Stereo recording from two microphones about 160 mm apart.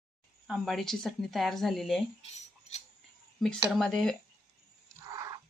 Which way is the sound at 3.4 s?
Centre (ahead or behind).